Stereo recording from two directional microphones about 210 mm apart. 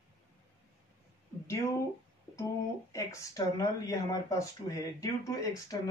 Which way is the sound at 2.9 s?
15° left (ahead or behind).